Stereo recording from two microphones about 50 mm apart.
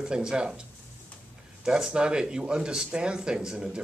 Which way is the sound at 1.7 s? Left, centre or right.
Centre.